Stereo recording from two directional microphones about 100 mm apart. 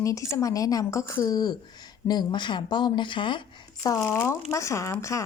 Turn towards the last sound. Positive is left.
turn(degrees=30)  # may be behind; listen again after turning